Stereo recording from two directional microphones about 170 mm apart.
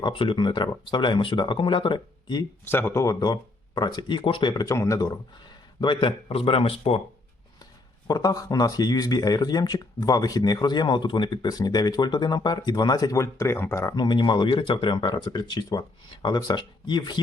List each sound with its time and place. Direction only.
0.0 s speech: 30° left (ahead or behind)
2.6 s speech: 15° left (ahead or behind)
5.8 s speech: 30° left (ahead or behind)
7.6 s speech: 25° left (ahead or behind)